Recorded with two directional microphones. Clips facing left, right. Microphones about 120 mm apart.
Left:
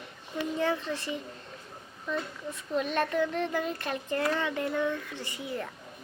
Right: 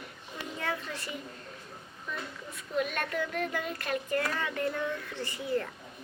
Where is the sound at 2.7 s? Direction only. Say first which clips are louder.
Left 4 dB; 30° left (ahead or behind).